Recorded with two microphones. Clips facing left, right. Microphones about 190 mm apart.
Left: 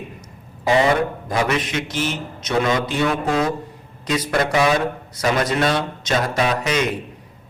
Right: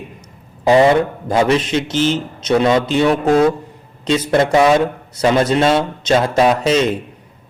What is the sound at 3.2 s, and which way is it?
Speech, 50° right (ahead or behind).